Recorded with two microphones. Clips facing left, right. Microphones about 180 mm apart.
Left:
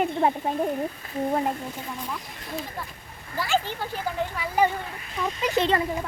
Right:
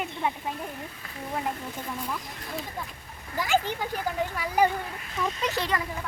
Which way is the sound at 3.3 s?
15° right (ahead or behind).